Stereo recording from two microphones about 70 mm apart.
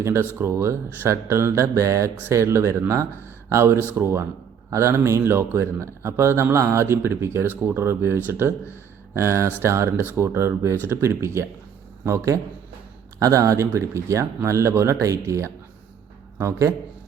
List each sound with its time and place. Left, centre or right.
0.0 s speech: right